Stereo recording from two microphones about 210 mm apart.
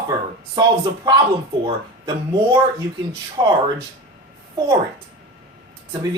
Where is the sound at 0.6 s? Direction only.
20° right (ahead or behind).